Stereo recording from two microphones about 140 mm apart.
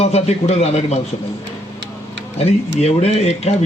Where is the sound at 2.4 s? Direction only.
50° left (ahead or behind).